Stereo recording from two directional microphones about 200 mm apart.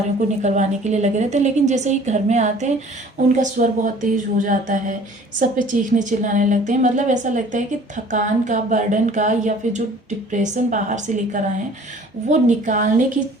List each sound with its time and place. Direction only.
0.2 s a woman's voice: 35° right (ahead or behind)